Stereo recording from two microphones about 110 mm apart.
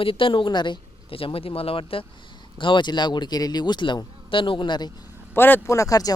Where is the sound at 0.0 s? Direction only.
55° left (ahead or behind).